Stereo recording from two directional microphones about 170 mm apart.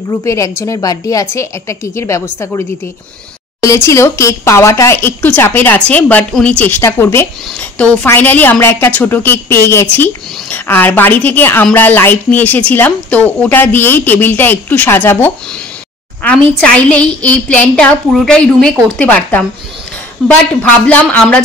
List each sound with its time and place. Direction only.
0.2 s a woman's voice: 20° left (ahead or behind)
3.6 s a woman's voice: 15° left (ahead or behind)
20.8 s a woman's voice: 5° left (ahead or behind)